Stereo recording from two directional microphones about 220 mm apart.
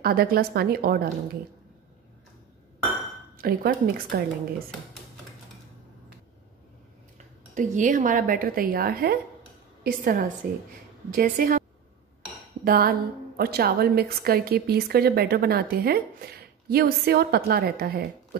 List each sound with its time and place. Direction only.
0.0 s a woman's voice: 40° right (ahead or behind)
3.3 s a woman's voice: 40° right (ahead or behind)
7.5 s speech: 35° right (ahead or behind)
12.6 s a sound: 40° right (ahead or behind)
13.4 s a woman's voice: 45° right (ahead or behind)